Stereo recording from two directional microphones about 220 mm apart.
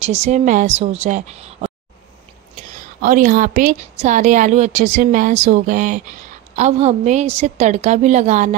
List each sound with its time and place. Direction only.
0.0 s a woman's voice: 30° right (ahead or behind)
2.7 s a woman's voice: 35° right (ahead or behind)